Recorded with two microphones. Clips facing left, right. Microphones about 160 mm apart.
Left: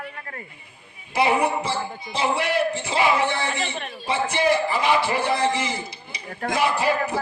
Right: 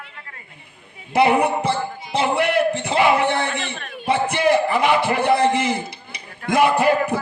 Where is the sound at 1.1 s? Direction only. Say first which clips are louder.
Right 4 dB; 55° right (ahead or behind).